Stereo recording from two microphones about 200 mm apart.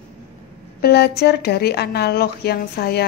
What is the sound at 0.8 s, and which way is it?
A woman's voice, 55° left (ahead or behind).